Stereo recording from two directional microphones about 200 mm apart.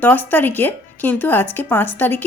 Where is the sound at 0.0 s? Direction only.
10° left (ahead or behind).